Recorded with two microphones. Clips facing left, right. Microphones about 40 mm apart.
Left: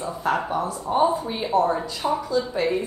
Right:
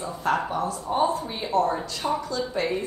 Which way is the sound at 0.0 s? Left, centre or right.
Centre.